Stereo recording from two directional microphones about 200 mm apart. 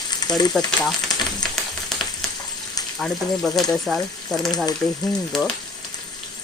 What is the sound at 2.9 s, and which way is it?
Speech, centre (ahead or behind).